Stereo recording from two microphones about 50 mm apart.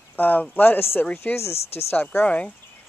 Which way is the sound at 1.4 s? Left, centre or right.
Left.